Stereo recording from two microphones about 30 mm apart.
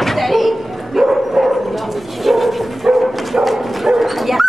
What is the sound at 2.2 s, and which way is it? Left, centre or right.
Dog, centre.